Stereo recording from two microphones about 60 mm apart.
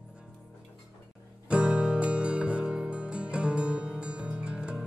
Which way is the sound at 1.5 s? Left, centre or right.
Centre.